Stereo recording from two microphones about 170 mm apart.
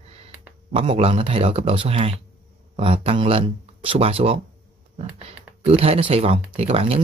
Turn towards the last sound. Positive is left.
turn(degrees=-35)  # may be behind; listen again after turning